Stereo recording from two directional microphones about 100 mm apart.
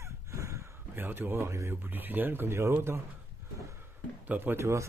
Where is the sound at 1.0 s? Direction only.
20° right (ahead or behind).